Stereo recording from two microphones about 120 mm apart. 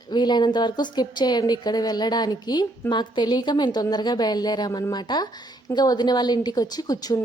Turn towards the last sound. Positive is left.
turn(degrees=30)  # may be behind; listen again after turning